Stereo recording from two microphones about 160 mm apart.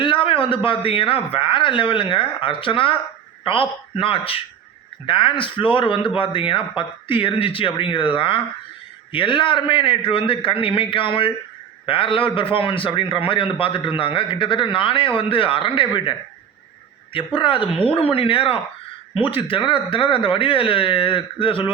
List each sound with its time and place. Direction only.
0.0 s a man's voice: 30° left (ahead or behind)